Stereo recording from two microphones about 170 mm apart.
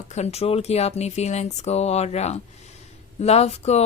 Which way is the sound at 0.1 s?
40° left (ahead or behind).